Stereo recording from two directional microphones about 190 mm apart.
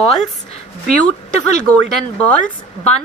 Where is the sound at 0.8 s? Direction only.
5° left (ahead or behind).